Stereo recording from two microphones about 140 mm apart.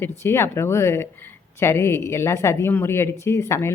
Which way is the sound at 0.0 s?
15° left (ahead or behind).